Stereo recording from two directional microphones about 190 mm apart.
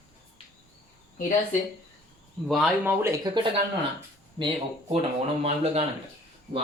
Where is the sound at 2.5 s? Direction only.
Centre (ahead or behind).